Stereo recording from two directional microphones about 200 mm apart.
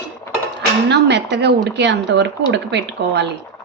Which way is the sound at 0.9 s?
60° right (ahead or behind).